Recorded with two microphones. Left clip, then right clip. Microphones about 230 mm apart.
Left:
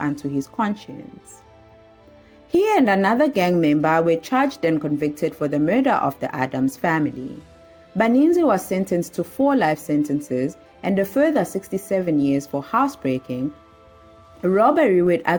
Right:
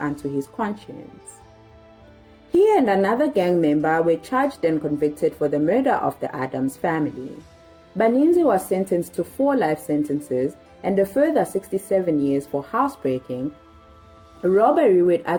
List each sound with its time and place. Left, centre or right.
0.0 s a woman's voice: left
2.5 s a woman's voice: left
14.4 s a woman's voice: left